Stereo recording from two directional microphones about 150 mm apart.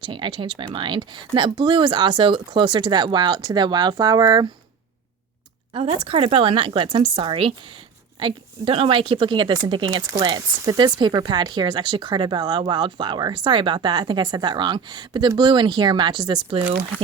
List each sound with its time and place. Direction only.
0.0 s speech: 35° right (ahead or behind)
5.7 s a woman's voice: 35° right (ahead or behind)